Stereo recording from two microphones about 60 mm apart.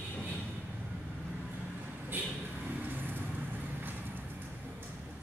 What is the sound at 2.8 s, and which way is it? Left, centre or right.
Vehicle, right.